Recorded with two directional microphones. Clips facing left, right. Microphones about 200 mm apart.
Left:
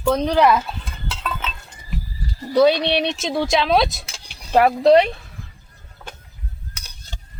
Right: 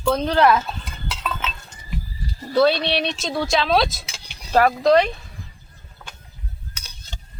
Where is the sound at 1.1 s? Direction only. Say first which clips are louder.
Even; 5° right (ahead or behind).